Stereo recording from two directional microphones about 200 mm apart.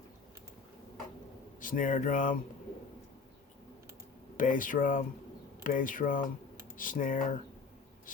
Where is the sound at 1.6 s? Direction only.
40° left (ahead or behind).